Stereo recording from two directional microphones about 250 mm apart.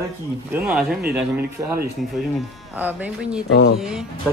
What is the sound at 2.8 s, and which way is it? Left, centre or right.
Speech, centre.